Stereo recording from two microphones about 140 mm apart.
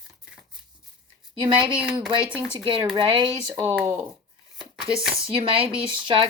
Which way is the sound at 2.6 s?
35° right (ahead or behind).